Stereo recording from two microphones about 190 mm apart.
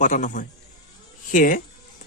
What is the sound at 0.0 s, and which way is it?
A man's voice, 40° left (ahead or behind).